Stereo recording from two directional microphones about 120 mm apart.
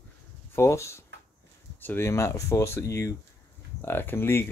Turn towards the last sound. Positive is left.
turn(degrees=20)  # may be behind; listen again after turning